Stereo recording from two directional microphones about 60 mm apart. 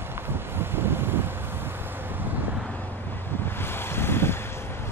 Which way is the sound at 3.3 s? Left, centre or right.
Left.